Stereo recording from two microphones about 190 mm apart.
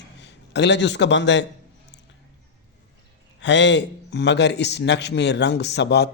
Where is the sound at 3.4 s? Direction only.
70° left (ahead or behind).